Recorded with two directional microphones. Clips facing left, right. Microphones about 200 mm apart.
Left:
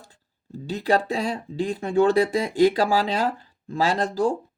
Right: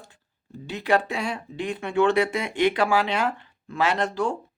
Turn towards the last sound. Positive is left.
turn(degrees=35)  # may be behind; listen again after turning